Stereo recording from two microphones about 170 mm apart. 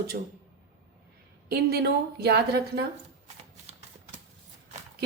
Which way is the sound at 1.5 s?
65° right (ahead or behind).